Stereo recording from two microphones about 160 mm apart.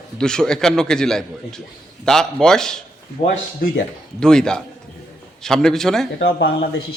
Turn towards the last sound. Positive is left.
turn(degrees=90)